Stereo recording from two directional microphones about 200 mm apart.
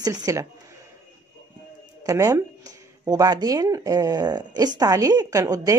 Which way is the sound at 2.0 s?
15° right (ahead or behind).